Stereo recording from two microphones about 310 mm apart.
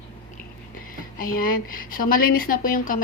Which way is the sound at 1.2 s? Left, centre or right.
Left.